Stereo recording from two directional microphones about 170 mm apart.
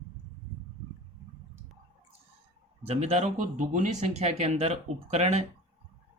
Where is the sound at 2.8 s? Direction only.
40° right (ahead or behind).